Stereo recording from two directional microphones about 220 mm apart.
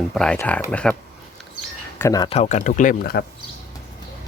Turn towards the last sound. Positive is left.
turn(degrees=40)  # may be behind; listen again after turning